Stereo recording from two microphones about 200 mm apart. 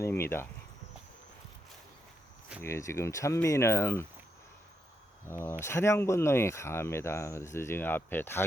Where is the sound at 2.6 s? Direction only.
15° left (ahead or behind).